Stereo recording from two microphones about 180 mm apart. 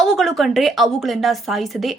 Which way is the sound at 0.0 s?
Centre (ahead or behind).